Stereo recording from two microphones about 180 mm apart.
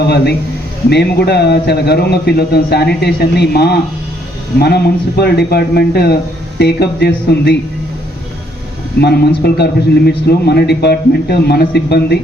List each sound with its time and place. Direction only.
0.9 s a man's voice: 65° left (ahead or behind)
9.0 s a man's voice: 60° left (ahead or behind)